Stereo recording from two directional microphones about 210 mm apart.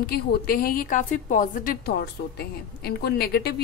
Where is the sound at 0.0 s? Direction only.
45° left (ahead or behind).